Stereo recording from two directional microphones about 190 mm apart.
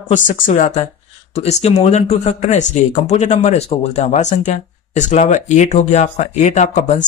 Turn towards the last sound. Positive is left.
turn(degrees=40)  # may be behind; listen again after turning